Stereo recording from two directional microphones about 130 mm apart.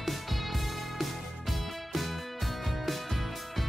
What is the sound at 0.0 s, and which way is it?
Music, centre (ahead or behind).